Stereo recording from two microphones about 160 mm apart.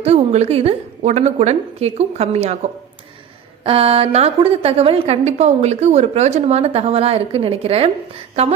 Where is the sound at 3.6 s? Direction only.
35° right (ahead or behind).